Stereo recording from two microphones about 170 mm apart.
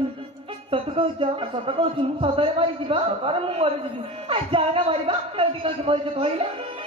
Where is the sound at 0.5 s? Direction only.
35° right (ahead or behind).